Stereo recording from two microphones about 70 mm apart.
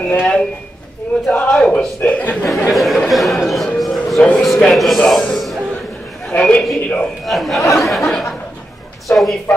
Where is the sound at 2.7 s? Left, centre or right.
Centre.